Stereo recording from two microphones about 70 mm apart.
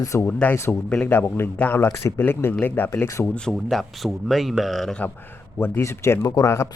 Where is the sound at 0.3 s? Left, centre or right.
Left.